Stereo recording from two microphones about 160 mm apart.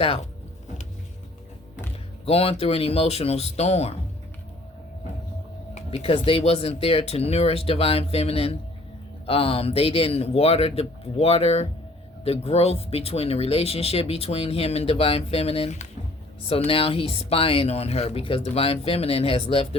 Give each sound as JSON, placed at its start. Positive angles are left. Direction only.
{"t": 2.2, "sound": "speech", "side_deg": 40}
{"t": 5.7, "sound": "speech", "side_deg": 40}